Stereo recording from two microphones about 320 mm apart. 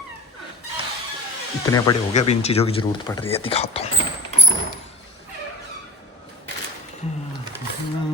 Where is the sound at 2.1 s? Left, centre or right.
Centre.